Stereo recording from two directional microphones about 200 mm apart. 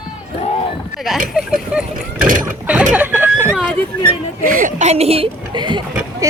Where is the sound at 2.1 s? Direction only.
45° right (ahead or behind).